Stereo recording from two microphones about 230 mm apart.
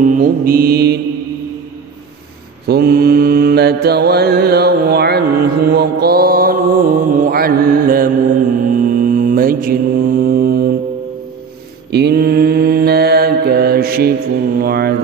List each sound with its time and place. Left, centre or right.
0.1 s mantra: right
2.7 s mantra: right
11.9 s mantra: right